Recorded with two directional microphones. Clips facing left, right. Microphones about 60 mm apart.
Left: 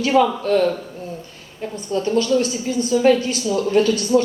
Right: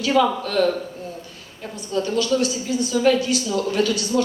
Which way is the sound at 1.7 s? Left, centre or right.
Left.